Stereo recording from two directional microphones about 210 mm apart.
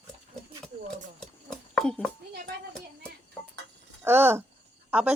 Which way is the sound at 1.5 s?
5° left (ahead or behind).